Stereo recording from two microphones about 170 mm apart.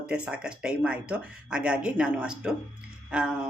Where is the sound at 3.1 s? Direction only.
5° right (ahead or behind).